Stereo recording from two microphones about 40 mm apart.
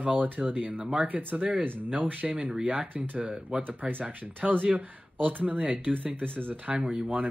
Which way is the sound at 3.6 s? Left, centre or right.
Right.